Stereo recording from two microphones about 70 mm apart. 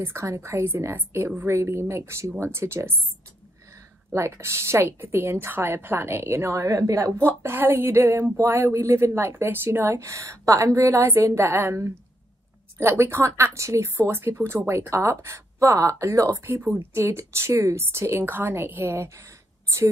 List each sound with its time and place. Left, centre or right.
0.0 s speech: right
4.1 s speech: right
7.2 s speech: right
16.4 s speech: right